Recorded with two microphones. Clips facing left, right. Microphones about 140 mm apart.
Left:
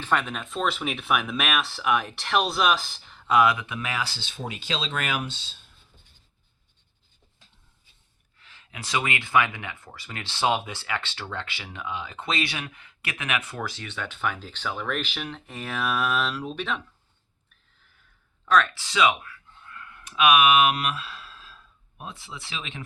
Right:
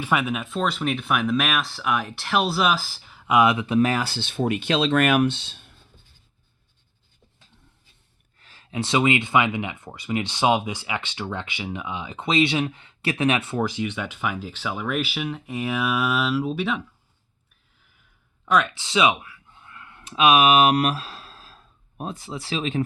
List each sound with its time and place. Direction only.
0.0 s speech: 10° right (ahead or behind); by 5.7 s 60° right (ahead or behind)
8.4 s speech: 35° right (ahead or behind)
13.7 s speech: 15° right (ahead or behind)
18.4 s speech: 15° right (ahead or behind); by 22.8 s 35° right (ahead or behind)